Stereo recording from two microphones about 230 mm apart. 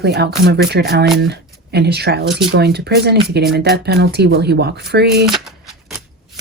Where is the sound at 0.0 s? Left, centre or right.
Right.